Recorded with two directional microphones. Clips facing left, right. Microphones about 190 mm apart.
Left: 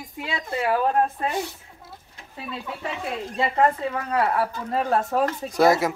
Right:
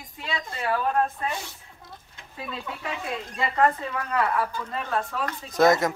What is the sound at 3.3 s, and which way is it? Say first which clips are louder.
Speech: left 2 dB; 30° left (ahead or behind).